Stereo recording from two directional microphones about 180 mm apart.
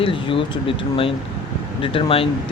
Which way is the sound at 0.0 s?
30° left (ahead or behind).